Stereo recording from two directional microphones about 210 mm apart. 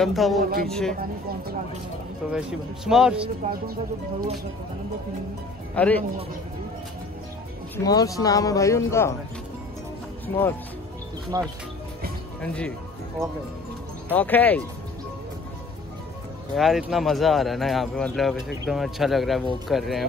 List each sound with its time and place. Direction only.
0.0 s speech: centre (ahead or behind)
0.4 s speech: 45° right (ahead or behind)
0.7 s speech: 5° left (ahead or behind)
2.3 s speech: 5° right (ahead or behind)
5.8 s speech: 5° left (ahead or behind)
7.7 s speech: 15° left (ahead or behind)
11.3 s speech: 15° right (ahead or behind)
12.4 s speech: 5° left (ahead or behind)
14.1 s speech: 10° left (ahead or behind)
16.5 s speech: centre (ahead or behind)